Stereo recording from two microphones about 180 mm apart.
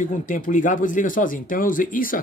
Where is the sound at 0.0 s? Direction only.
45° left (ahead or behind).